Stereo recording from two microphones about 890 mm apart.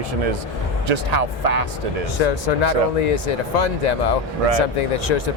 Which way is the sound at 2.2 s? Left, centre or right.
Left.